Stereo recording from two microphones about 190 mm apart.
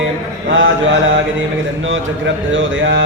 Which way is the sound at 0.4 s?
80° right.